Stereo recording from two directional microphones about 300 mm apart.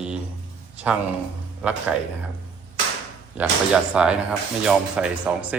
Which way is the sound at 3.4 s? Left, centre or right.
Centre.